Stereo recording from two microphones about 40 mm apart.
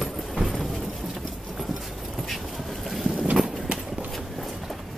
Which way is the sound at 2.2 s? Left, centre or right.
Centre.